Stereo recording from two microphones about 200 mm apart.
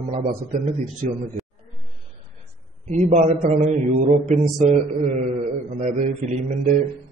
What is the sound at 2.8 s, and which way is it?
Mantra, 40° right (ahead or behind).